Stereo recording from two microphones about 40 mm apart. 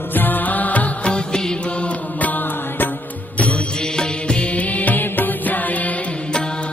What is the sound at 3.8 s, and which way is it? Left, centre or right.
Music, centre.